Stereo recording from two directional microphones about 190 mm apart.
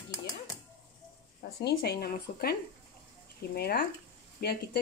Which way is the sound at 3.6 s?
55° left (ahead or behind).